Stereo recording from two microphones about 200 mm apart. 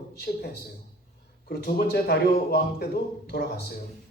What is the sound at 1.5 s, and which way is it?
Speech, 50° left (ahead or behind).